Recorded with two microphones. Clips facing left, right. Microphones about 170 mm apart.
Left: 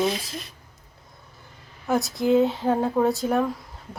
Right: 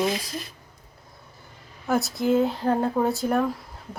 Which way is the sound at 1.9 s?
Centre (ahead or behind).